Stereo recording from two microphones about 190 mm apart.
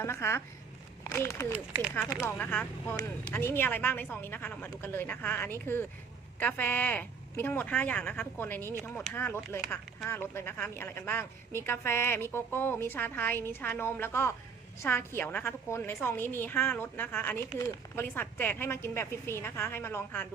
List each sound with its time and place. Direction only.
0.0 s speech: 15° left (ahead or behind)